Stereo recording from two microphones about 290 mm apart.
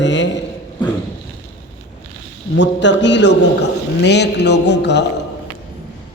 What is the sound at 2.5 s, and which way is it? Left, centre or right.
Mantra, left.